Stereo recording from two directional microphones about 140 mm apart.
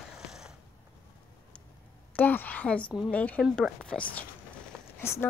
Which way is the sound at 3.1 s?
10° left (ahead or behind).